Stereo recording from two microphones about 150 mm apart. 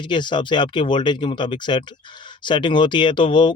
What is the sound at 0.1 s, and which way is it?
Speech, 30° left (ahead or behind).